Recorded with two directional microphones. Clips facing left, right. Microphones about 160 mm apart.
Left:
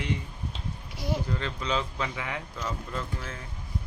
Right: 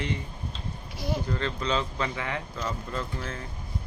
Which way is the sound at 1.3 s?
5° left (ahead or behind).